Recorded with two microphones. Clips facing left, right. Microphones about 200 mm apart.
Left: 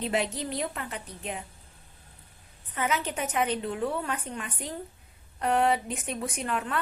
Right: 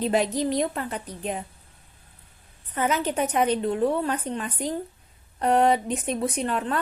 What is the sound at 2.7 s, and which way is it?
A woman's voice, 35° right (ahead or behind).